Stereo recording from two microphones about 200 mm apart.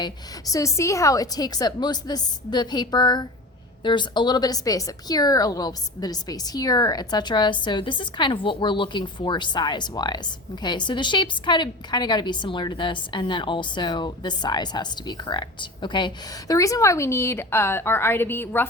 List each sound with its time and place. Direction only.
0.0 s a woman's voice: 15° left (ahead or behind)